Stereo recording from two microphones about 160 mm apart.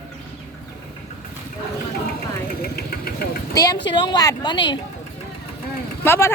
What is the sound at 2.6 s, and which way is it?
Vehicle, 75° left (ahead or behind).